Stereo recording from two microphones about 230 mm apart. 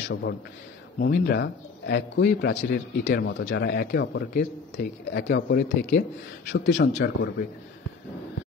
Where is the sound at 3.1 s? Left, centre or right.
Left.